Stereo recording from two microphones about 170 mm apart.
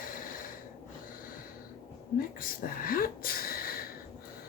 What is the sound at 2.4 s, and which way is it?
Speech, 55° left (ahead or behind).